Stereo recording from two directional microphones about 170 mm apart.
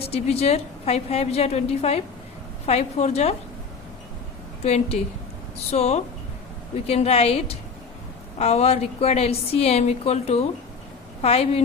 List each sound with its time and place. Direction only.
0.0 s a woman's voice: 35° left (ahead or behind)
4.6 s a woman's voice: 40° left (ahead or behind)